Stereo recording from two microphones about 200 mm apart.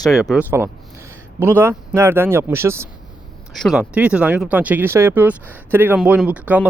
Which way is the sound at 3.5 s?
Centre (ahead or behind).